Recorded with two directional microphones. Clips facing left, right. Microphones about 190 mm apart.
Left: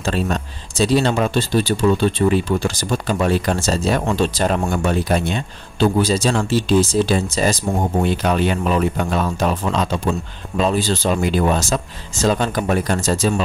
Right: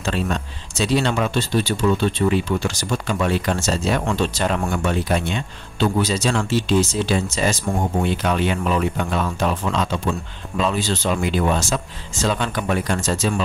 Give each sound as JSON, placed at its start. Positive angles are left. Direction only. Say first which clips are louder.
{"t": 0.0, "sound": "speech", "louder": "left 2 dB", "side_deg": 35}